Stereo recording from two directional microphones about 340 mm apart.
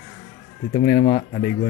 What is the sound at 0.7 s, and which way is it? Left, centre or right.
Speech, centre.